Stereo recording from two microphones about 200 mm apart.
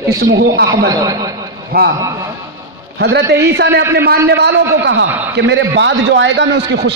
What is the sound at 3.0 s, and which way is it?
A man's voice, 60° right (ahead or behind).